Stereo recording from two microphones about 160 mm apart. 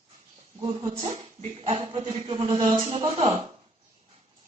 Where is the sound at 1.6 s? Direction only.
35° right (ahead or behind).